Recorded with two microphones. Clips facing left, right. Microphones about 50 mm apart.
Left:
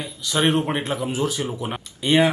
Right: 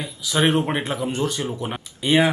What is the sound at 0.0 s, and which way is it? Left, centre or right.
Speech, centre.